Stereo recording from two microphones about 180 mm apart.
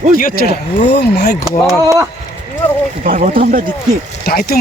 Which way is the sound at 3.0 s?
50° right (ahead or behind).